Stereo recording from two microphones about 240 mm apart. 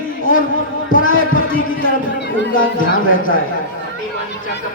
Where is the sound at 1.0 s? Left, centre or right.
Left.